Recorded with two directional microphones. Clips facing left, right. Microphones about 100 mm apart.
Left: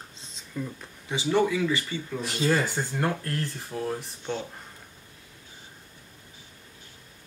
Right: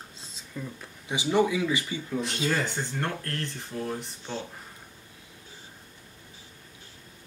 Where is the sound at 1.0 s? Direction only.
15° right (ahead or behind).